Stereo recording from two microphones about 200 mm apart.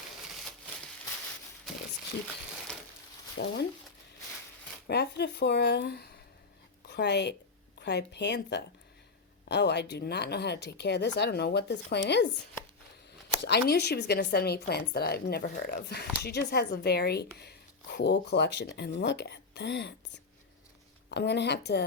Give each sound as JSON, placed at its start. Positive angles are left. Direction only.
{"t": 3.3, "sound": "speech", "side_deg": 60}
{"t": 4.9, "sound": "a woman's voice", "side_deg": 55}
{"t": 13.4, "sound": "a woman's voice", "side_deg": 55}
{"t": 21.1, "sound": "speech", "side_deg": 55}